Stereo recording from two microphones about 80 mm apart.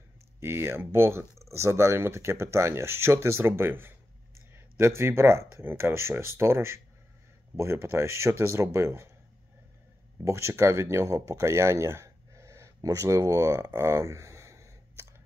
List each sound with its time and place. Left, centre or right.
0.4 s speech: right
10.2 s speech: right
13.7 s a sound: right